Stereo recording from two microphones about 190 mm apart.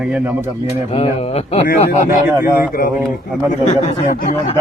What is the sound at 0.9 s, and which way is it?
Speech, 30° left (ahead or behind).